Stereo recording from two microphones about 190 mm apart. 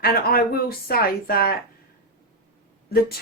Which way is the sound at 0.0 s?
55° left (ahead or behind).